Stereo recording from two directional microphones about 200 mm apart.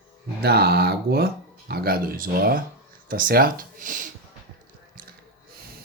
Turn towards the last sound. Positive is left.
turn(degrees=-40)  # may be behind; listen again after turning